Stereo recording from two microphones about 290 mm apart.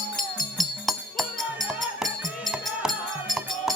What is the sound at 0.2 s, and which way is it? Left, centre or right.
Music, centre.